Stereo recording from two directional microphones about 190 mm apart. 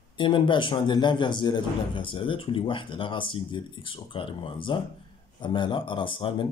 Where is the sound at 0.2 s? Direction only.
25° left (ahead or behind).